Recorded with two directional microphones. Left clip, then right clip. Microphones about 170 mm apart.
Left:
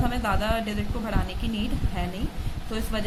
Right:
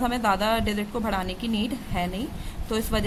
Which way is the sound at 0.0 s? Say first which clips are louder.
Right 4 dB; 35° right (ahead or behind).